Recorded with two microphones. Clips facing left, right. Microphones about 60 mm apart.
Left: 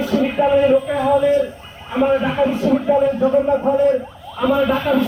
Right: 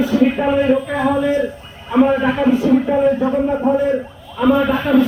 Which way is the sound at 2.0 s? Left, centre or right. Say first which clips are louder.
Right 2 dB; centre.